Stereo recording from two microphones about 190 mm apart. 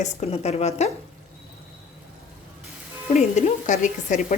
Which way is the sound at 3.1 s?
40° left (ahead or behind).